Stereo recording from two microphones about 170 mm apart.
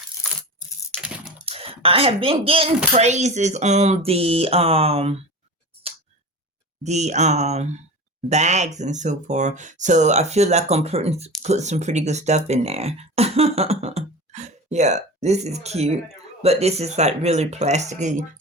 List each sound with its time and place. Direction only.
1.0 s typing: 5° right (ahead or behind)
1.4 s speech: 35° right (ahead or behind)
6.8 s speech: 40° right (ahead or behind)